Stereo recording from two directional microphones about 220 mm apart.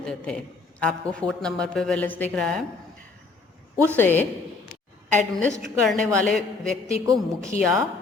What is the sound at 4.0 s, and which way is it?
A woman's voice, 10° left (ahead or behind).